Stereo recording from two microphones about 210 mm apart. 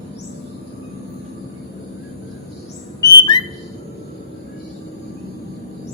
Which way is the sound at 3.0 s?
20° left (ahead or behind).